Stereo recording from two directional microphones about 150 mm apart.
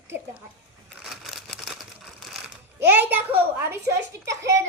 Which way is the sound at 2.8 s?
10° right (ahead or behind).